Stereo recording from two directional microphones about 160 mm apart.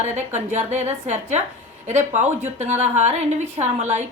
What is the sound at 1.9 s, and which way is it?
A woman's voice, 45° right (ahead or behind).